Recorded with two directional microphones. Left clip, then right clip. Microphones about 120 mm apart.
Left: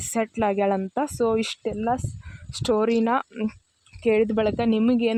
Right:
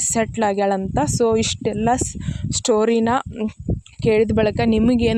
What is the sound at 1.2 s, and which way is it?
Speech, 65° right (ahead or behind).